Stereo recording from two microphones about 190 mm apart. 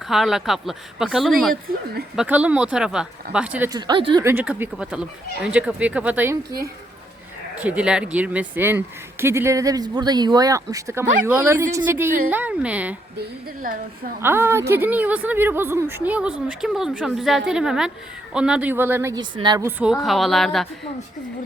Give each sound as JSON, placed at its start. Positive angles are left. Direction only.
{"t": 0.1, "sound": "speech", "side_deg": 0}
{"t": 3.7, "sound": "a woman's voice", "side_deg": -25}
{"t": 4.2, "sound": "speech", "side_deg": -10}
{"t": 7.6, "sound": "speech", "side_deg": -5}
{"t": 13.1, "sound": "a woman's voice", "side_deg": -45}
{"t": 14.2, "sound": "speech", "side_deg": -10}
{"t": 19.8, "sound": "speech", "side_deg": 0}